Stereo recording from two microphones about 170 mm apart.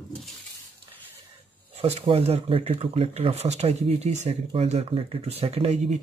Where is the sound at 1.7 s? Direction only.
35° right (ahead or behind).